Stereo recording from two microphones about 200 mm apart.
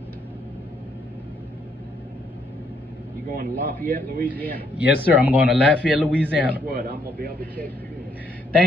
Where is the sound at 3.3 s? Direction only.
50° right (ahead or behind).